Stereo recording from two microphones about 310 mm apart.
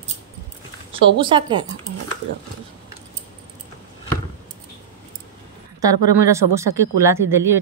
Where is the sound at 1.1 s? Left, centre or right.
Centre.